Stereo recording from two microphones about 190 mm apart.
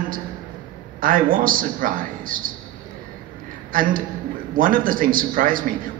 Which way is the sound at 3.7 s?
45° right (ahead or behind).